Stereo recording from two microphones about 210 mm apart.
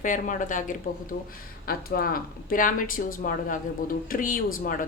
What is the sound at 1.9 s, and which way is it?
Speech, 45° left (ahead or behind).